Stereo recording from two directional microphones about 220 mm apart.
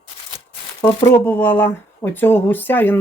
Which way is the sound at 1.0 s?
10° left (ahead or behind).